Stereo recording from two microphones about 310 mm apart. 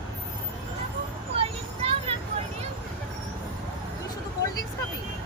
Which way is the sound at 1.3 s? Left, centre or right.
Centre.